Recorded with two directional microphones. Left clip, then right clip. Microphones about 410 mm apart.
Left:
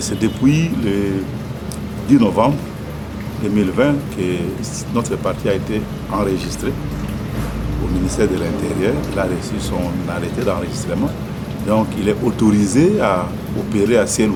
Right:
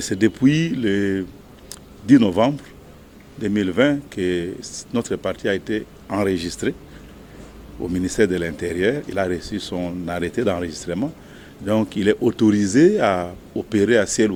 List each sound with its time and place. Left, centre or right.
0.0 s speech: right
3.5 s speech: right
8.0 s speech: right
11.7 s speech: right